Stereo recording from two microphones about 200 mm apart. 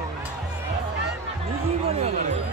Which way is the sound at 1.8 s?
30° right (ahead or behind).